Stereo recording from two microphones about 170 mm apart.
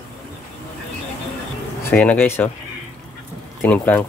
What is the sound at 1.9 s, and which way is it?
Speech, 10° left (ahead or behind).